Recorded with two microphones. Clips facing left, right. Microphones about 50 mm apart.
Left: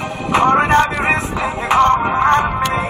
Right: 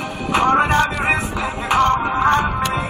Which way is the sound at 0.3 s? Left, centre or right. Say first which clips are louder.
Left 3 dB; left.